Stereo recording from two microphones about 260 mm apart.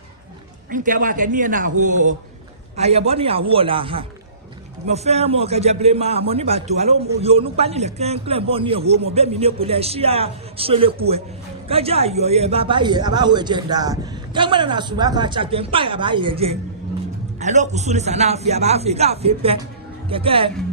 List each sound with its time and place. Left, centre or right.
0.7 s a man's voice: right